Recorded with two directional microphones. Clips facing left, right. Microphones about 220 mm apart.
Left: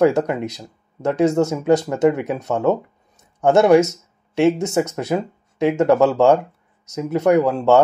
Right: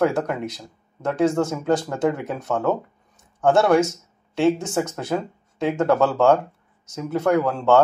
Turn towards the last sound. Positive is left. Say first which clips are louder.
# left 4 dB
turn(degrees=15)  # may be behind; listen again after turning